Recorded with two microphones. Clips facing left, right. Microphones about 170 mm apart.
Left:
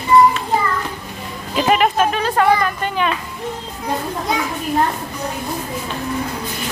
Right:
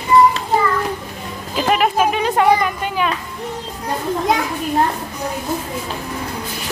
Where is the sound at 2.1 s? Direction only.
15° right (ahead or behind).